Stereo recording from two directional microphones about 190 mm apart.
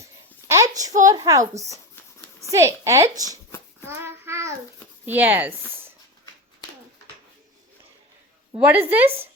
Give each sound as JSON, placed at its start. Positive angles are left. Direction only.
{"t": 0.4, "sound": "a woman's voice", "side_deg": -15}
{"t": 3.8, "sound": "child singing", "side_deg": -15}
{"t": 5.0, "sound": "a woman's voice", "side_deg": -10}
{"t": 8.6, "sound": "a woman's voice", "side_deg": -10}